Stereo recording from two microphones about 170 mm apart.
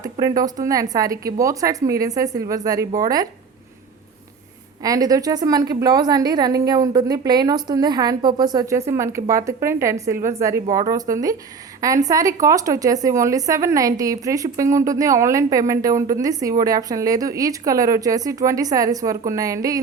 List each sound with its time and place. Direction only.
0.0 s a woman's voice: 20° right (ahead or behind)
4.8 s a woman's voice: 20° right (ahead or behind)